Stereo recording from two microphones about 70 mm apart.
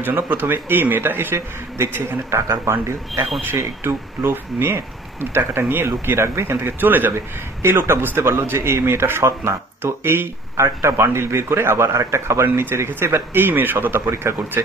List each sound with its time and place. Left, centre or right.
0.0 s speech: right